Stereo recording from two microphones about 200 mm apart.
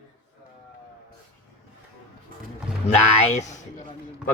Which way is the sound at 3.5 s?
35° left (ahead or behind).